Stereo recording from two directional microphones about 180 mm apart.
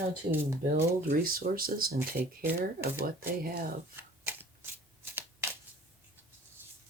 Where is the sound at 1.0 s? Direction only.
55° right (ahead or behind).